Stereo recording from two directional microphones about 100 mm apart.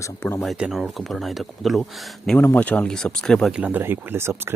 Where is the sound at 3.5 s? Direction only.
15° right (ahead or behind).